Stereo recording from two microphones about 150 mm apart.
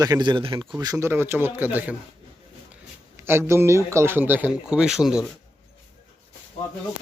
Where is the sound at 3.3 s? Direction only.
15° right (ahead or behind).